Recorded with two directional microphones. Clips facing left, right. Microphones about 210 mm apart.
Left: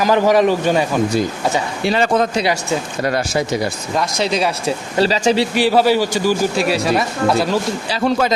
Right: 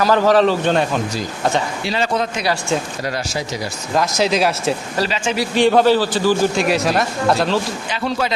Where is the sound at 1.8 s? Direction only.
55° left (ahead or behind).